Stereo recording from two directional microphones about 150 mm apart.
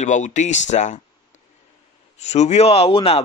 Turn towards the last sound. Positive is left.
turn(degrees=40)  # may be behind; listen again after turning